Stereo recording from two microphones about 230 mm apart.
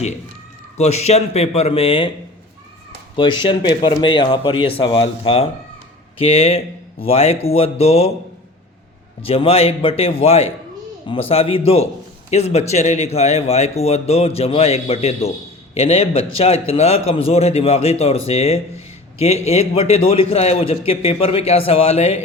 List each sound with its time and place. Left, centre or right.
0.8 s a man's voice: left
3.2 s a man's voice: left
9.2 s a man's voice: left